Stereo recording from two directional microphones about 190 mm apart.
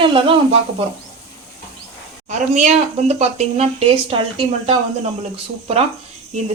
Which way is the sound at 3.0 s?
35° right (ahead or behind).